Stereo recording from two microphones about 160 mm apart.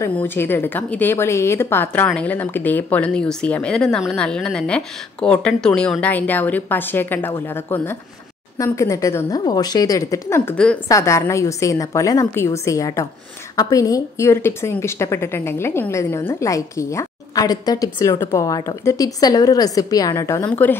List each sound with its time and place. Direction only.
0.0 s a woman's voice: 15° left (ahead or behind)
10.9 s a woman's voice: 20° left (ahead or behind)